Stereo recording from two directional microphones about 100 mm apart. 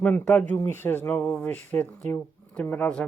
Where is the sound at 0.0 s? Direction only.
15° left (ahead or behind).